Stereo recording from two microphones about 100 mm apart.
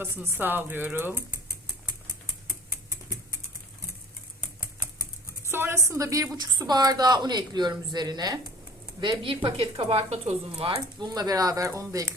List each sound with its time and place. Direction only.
0.3 s speech: 20° right (ahead or behind)
5.5 s a sound: 25° right (ahead or behind)
6.3 s a woman's voice: 45° right (ahead or behind)
9.0 s speech: 55° right (ahead or behind)
11.0 s speech: 40° right (ahead or behind)